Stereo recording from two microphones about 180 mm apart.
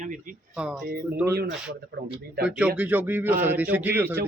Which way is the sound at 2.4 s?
5° right (ahead or behind).